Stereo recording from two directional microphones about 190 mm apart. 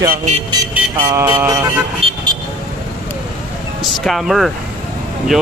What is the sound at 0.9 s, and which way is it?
Music, 20° right (ahead or behind).